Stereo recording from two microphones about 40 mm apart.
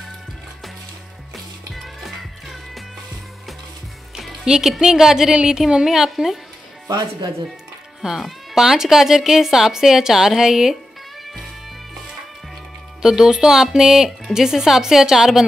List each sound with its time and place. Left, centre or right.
1.3 s music: centre
4.5 s a woman's voice: centre
5.3 s a woman's voice: right
5.9 s a woman's voice: centre
8.5 s a woman's voice: centre
13.0 s a woman's voice: centre